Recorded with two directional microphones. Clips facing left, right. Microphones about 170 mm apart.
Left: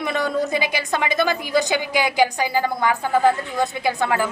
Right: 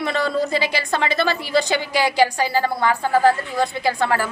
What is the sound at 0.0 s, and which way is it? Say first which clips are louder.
A woman's voice: right 1 dB; 15° left (ahead or behind).